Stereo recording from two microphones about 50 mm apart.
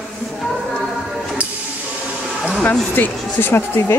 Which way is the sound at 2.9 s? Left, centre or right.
Left.